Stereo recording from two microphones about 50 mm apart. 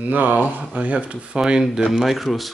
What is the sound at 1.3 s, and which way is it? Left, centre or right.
Speech, centre.